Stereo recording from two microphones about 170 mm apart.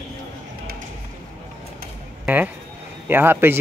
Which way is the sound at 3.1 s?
10° right (ahead or behind).